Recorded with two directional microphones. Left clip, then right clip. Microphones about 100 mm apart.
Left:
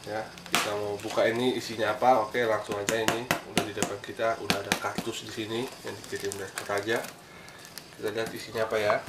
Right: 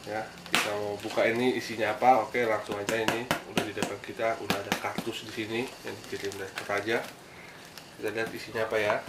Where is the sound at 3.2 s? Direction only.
25° left (ahead or behind).